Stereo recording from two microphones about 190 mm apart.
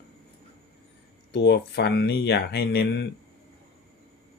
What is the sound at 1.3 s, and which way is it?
Speech, 60° left (ahead or behind).